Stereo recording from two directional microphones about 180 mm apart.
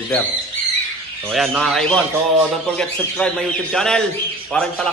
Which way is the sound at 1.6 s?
Centre (ahead or behind).